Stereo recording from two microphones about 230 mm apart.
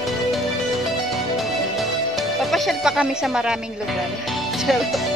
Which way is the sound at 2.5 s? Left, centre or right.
Centre.